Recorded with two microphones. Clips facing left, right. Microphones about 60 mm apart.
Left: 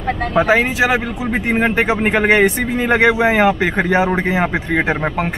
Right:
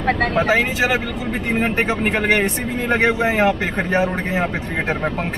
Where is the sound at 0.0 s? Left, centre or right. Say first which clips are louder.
Right 2 dB; right.